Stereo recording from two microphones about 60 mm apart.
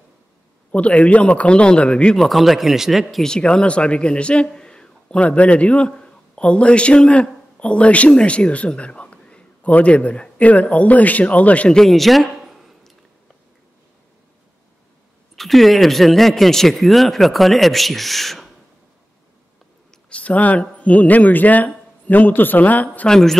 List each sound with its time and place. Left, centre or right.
0.7 s a man's voice: left
2.1 s speech: centre
3.3 s a man's voice: centre
11.7 s a sound: centre
15.3 s speech: centre
19.9 s a sound: left
20.7 s speech: left
23.0 s speech: centre